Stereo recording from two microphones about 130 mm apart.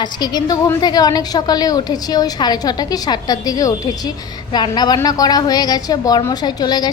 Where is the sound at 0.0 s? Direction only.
30° left (ahead or behind).